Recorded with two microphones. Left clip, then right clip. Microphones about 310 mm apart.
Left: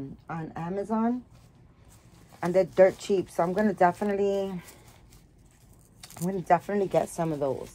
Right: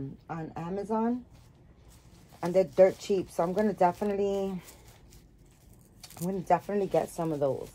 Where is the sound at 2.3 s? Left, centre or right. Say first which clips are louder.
Left 2 dB; left.